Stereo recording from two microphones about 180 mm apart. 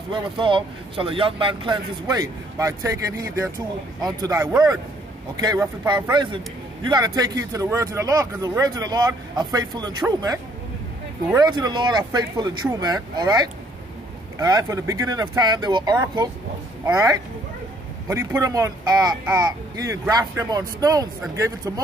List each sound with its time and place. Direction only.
0.1 s speech: 25° right (ahead or behind)